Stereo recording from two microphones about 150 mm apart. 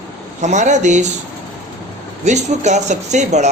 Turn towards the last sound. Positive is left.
turn(degrees=-50)  # may be behind; listen again after turning